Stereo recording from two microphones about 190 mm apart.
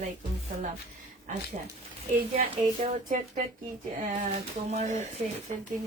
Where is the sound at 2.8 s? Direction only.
40° right (ahead or behind).